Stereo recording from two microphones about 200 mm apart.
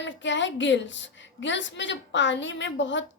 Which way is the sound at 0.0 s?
65° left (ahead or behind).